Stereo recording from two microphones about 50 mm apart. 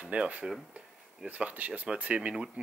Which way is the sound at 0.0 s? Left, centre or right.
Right.